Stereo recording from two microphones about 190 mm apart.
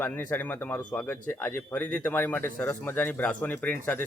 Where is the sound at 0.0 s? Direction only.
10° left (ahead or behind).